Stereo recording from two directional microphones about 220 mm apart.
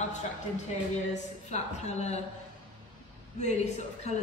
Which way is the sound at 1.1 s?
30° left (ahead or behind).